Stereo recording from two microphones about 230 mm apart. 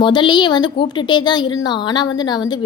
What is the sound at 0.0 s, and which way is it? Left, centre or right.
A woman's voice, centre.